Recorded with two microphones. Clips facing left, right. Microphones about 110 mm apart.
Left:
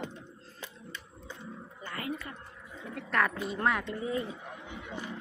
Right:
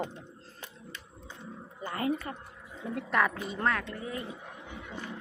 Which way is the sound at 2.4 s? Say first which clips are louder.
Right 2 dB; 20° right (ahead or behind).